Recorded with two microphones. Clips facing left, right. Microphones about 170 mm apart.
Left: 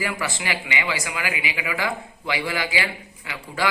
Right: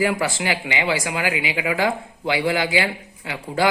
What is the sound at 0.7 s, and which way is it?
Speech, 30° right (ahead or behind).